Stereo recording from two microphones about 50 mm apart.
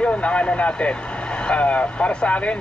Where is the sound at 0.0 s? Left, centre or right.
Left.